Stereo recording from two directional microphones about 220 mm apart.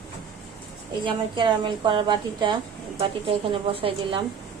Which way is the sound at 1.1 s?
20° right (ahead or behind).